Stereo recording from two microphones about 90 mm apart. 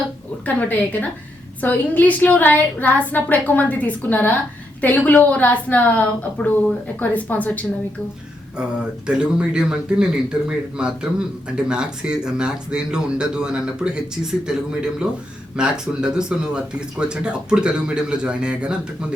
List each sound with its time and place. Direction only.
0.4 s a woman's voice: 20° left (ahead or behind)
8.5 s speech: 10° right (ahead or behind)